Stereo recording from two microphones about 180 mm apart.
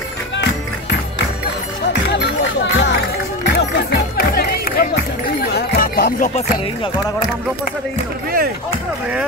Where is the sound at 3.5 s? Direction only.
60° left (ahead or behind).